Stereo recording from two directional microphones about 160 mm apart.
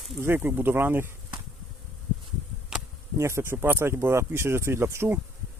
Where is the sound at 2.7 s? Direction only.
5° right (ahead or behind).